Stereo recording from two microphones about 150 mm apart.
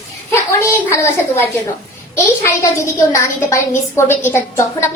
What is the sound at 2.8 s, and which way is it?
A woman's voice, 20° left (ahead or behind).